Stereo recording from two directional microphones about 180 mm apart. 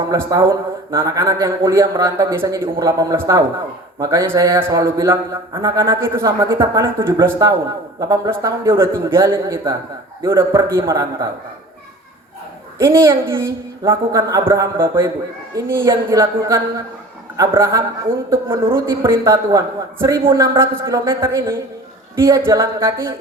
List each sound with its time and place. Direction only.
0.1 s a man's voice: 15° right (ahead or behind)
12.8 s a man's voice: 15° right (ahead or behind)